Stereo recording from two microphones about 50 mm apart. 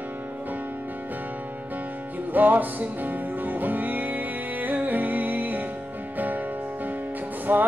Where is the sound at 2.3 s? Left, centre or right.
Right.